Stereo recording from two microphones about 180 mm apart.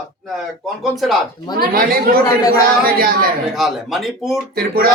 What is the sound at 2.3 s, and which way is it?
Speech, 20° left (ahead or behind).